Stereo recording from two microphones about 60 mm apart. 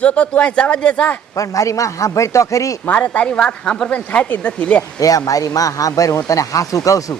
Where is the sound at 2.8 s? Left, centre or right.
Left.